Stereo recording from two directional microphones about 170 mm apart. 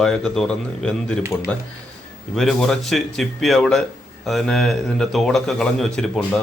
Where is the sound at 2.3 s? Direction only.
Centre (ahead or behind).